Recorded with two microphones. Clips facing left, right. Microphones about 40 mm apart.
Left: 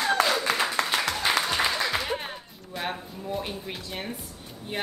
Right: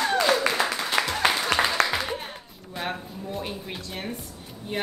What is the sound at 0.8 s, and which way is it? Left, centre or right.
Applause, left.